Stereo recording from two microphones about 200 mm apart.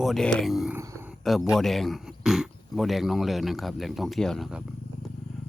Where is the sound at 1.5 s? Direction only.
Centre (ahead or behind).